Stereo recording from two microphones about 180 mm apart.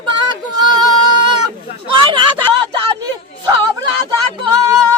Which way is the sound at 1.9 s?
30° right (ahead or behind).